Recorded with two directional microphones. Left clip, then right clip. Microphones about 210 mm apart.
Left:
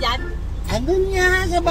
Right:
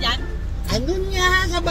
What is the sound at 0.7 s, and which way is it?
Speech, 15° right (ahead or behind).